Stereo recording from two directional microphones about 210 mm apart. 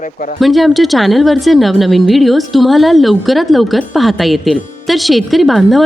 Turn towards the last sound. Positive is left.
turn(degrees=0)  # may be behind; listen again after turning